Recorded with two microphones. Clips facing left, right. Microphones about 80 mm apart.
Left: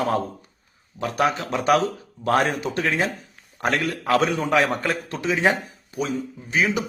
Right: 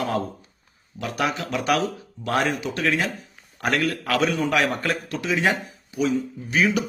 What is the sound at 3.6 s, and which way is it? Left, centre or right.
A man's voice, left.